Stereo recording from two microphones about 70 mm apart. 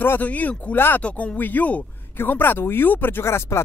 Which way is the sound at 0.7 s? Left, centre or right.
Left.